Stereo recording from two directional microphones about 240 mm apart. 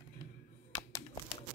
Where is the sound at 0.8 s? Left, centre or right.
Centre.